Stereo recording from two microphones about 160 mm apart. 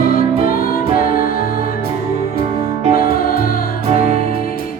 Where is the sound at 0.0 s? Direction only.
65° left (ahead or behind).